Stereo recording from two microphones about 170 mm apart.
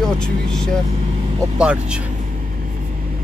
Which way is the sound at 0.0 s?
5° left (ahead or behind).